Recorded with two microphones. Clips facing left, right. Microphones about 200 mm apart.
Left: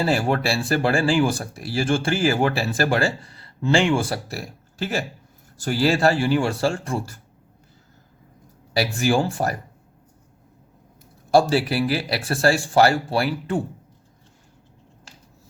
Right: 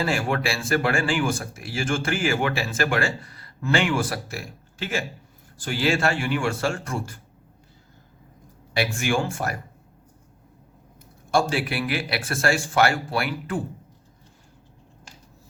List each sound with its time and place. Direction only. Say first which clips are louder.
0.0 s speech: left 3 dB; 35° left (ahead or behind)
8.7 s speech: left 4 dB; 35° left (ahead or behind)
11.3 s speech: left 5 dB; 35° left (ahead or behind)